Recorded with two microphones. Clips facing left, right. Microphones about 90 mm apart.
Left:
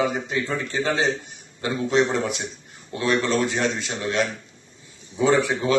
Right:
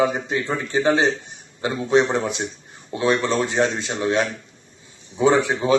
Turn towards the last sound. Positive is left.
turn(degrees=-25)  # may be behind; listen again after turning